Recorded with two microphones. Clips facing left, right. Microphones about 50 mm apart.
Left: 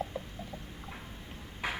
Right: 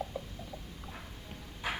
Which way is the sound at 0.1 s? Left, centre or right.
Left.